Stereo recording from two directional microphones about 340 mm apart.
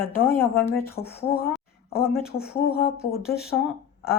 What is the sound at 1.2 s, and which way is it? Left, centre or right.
Speech, left.